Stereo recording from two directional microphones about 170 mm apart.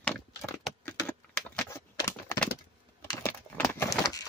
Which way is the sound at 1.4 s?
10° left (ahead or behind).